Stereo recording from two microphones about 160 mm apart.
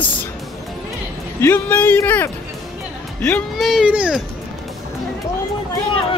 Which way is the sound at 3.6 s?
5° right (ahead or behind).